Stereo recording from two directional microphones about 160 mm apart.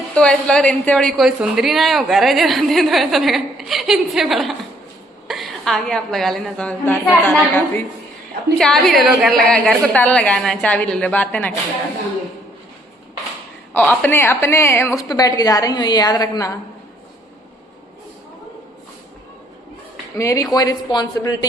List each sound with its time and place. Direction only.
0.1 s a woman's voice: 5° left (ahead or behind)
13.7 s a woman's voice: 10° left (ahead or behind)
20.1 s a woman's voice: 20° left (ahead or behind)